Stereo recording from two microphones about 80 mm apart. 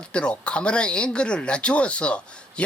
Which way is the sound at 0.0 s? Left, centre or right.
Centre.